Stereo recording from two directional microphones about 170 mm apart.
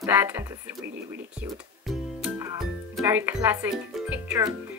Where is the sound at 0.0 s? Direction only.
10° right (ahead or behind).